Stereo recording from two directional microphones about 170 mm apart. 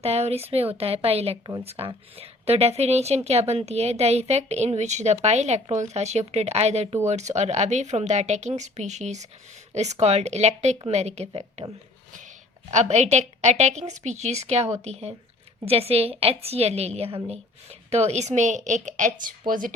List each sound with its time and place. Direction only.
0.0 s a woman's voice: 40° right (ahead or behind)
12.7 s a woman's voice: 40° right (ahead or behind)